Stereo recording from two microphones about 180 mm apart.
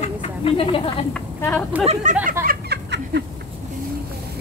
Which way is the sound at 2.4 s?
60° right (ahead or behind).